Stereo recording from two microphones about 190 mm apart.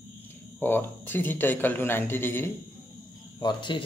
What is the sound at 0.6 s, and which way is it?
A man's voice, 10° left (ahead or behind).